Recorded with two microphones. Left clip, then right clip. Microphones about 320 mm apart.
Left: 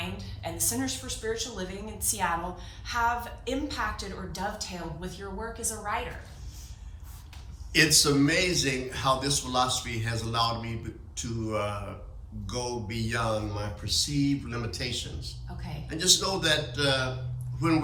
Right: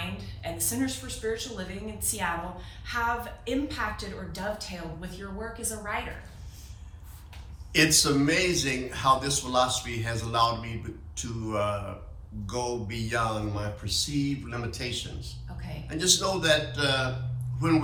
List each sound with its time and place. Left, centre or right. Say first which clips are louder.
0.4 s a woman's voice: even; centre
7.7 s a man's voice: even; centre